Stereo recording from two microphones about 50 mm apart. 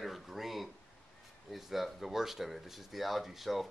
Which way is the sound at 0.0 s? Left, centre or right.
Centre.